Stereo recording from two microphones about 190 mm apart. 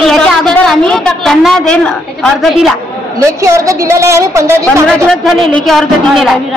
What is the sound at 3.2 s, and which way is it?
A woman's voice, 15° right (ahead or behind).